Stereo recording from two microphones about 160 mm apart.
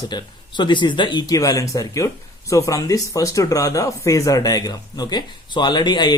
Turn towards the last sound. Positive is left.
turn(degrees=25)  # may be behind; listen again after turning